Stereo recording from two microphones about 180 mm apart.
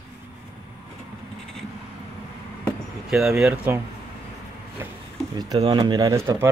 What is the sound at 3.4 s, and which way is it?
Speech, 15° right (ahead or behind).